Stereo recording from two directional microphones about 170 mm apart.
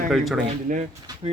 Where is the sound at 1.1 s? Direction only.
20° right (ahead or behind).